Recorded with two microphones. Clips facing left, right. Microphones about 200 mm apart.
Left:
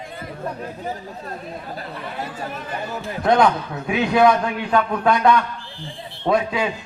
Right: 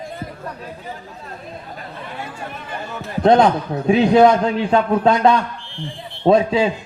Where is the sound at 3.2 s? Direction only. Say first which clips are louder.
Right 4 dB; 25° right (ahead or behind).